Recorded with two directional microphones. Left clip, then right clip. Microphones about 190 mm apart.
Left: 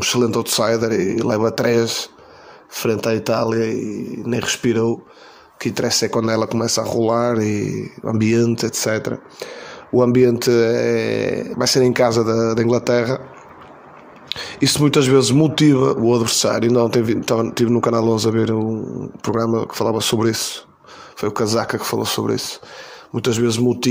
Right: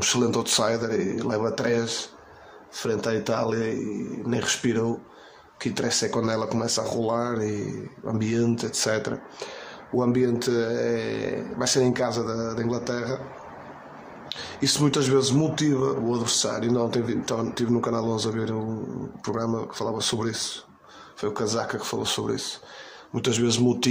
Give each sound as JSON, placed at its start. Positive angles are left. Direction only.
{"t": 0.0, "sound": "speech", "side_deg": 25}
{"t": 14.3, "sound": "speech", "side_deg": 30}